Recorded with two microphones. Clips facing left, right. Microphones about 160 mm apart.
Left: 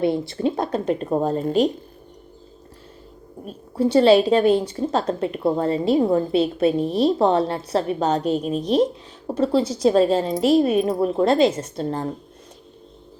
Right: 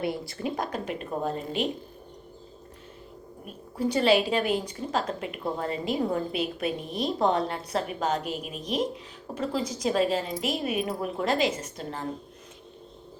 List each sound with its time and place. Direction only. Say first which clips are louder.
0.0 s a woman's voice: left 9 dB; 25° left (ahead or behind)
3.4 s a woman's voice: left 7 dB; 30° left (ahead or behind)